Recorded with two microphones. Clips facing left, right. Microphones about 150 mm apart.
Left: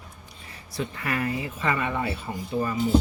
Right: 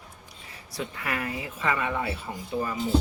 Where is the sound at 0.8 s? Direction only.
15° right (ahead or behind).